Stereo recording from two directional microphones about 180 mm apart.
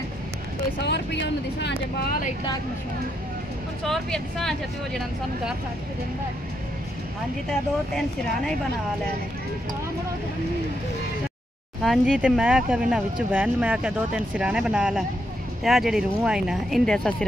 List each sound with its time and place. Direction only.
0.8 s speech: 70° left (ahead or behind)
3.8 s speech: centre (ahead or behind)
11.8 s speech: centre (ahead or behind)